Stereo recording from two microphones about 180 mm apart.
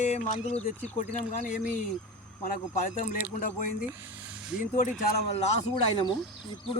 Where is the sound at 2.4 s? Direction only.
50° left (ahead or behind).